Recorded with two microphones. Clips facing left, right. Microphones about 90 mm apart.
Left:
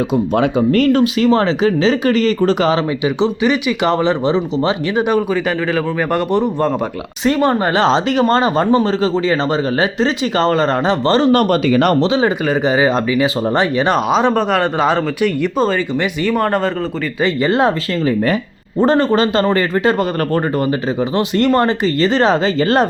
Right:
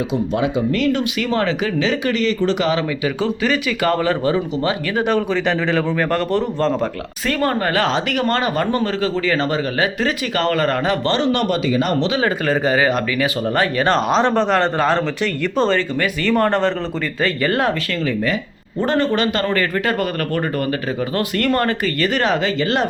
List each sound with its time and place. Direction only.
0.3 s speech: 45° left (ahead or behind)
3.2 s speech: 15° left (ahead or behind)
5.0 s speech: 10° left (ahead or behind)
6.1 s speech: 15° left (ahead or behind); by 11.9 s 60° left (ahead or behind)
12.2 s speech: 20° left (ahead or behind)
17.2 s speech: 20° left (ahead or behind)